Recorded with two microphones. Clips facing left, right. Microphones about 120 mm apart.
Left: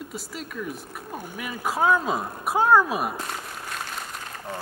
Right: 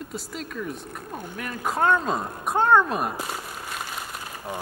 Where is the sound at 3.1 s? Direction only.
5° right (ahead or behind).